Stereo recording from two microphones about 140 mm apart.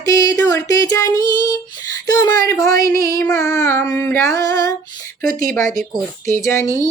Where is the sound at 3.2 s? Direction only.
20° left (ahead or behind).